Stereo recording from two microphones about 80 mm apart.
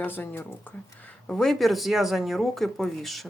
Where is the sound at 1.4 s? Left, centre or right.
Centre.